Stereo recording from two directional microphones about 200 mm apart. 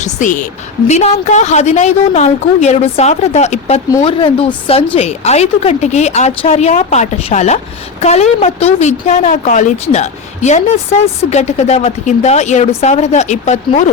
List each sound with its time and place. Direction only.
0.0 s a woman's voice: 40° left (ahead or behind)